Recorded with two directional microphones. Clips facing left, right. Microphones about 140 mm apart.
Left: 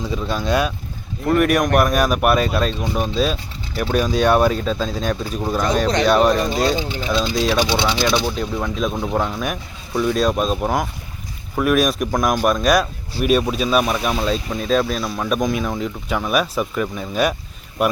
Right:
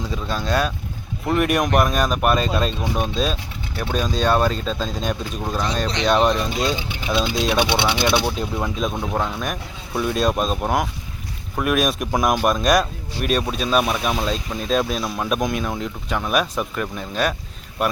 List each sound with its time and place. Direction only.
0.1 s speech: 10° left (ahead or behind)
6.3 s speech: 45° left (ahead or behind)
7.5 s speech: 20° right (ahead or behind); by 17.3 s 5° left (ahead or behind)